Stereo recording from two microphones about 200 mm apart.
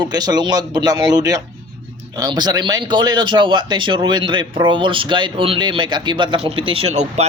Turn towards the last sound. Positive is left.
turn(degrees=-30)  # may be behind; listen again after turning